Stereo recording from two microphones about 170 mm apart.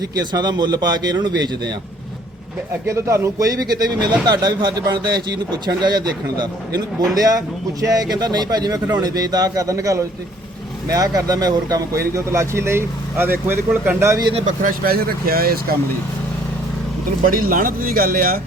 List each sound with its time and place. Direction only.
0.2 s speech: 25° right (ahead or behind)
2.8 s speech: 15° right (ahead or behind)
14.3 s speech: 50° right (ahead or behind)
17.2 s speech: 55° right (ahead or behind)